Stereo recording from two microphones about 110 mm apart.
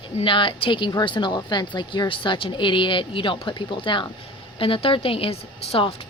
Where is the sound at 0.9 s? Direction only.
40° left (ahead or behind).